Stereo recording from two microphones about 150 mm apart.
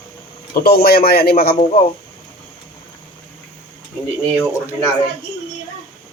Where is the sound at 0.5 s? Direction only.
90° left.